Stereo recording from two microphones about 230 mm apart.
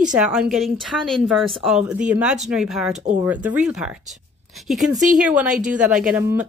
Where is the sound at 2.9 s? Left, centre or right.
Right.